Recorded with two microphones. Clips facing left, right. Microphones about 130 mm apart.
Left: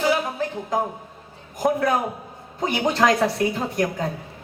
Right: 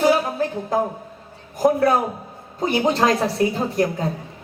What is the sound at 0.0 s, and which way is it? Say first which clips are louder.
Music: right 4 dB; 40° right (ahead or behind).